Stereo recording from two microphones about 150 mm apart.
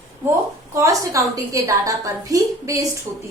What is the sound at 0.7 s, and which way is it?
A woman's voice, 20° right (ahead or behind).